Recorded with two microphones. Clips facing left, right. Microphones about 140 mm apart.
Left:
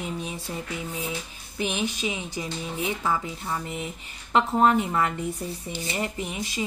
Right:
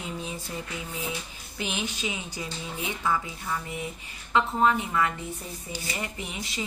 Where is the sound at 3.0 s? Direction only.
30° left (ahead or behind).